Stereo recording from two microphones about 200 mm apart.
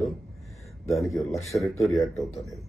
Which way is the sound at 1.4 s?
15° left (ahead or behind).